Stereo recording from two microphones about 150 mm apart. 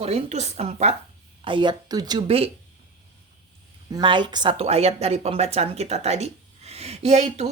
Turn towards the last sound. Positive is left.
turn(degrees=-50)  # may be behind; listen again after turning